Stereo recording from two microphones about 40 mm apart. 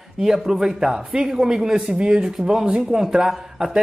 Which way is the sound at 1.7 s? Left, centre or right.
Right.